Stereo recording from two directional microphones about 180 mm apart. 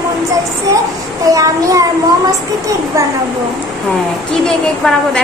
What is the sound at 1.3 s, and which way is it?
Speech, 20° right (ahead or behind).